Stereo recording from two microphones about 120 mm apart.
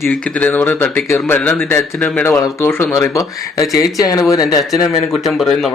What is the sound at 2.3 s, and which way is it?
Speech, 25° left (ahead or behind).